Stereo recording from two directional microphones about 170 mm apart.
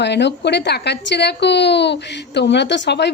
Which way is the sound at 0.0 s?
90° left.